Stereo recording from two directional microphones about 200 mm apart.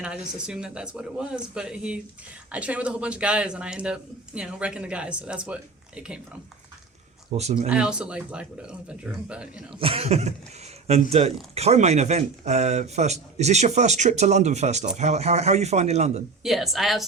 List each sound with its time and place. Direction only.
0.4 s a man's voice: 5° right (ahead or behind)
7.3 s speech: 35° right (ahead or behind)
7.7 s a man's voice: 5° right (ahead or behind)
9.8 s speech: 30° right (ahead or behind)
16.4 s a man's voice: centre (ahead or behind)